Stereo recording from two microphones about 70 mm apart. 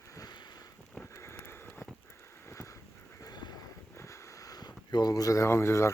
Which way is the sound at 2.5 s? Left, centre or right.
Left.